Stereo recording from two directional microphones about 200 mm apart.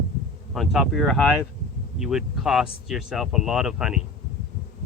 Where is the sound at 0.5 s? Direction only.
Centre (ahead or behind).